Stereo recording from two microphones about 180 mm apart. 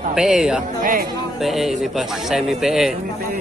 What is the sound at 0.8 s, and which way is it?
Speech, 50° right (ahead or behind).